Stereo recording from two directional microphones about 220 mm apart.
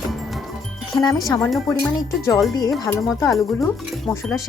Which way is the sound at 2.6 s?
15° left (ahead or behind).